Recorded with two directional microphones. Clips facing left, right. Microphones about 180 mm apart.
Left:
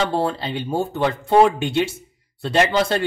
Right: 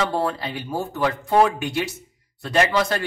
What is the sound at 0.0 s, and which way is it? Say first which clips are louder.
Speech: left 2 dB; 25° left (ahead or behind).